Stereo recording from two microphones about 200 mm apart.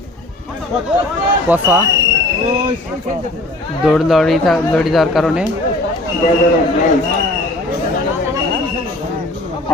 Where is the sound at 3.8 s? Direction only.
Centre (ahead or behind).